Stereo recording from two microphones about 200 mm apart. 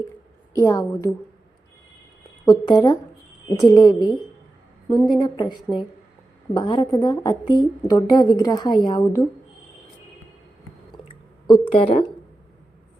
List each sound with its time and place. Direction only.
0.6 s a woman's voice: 15° left (ahead or behind)
2.4 s a woman's voice: 20° left (ahead or behind)
11.1 s a sound: 20° left (ahead or behind)